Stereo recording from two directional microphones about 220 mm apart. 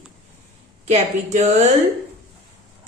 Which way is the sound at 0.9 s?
30° right (ahead or behind).